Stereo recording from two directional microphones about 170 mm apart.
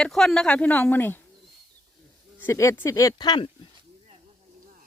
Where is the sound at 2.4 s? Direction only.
15° left (ahead or behind).